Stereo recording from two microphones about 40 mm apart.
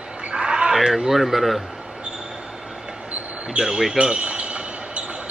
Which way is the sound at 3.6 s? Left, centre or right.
Centre.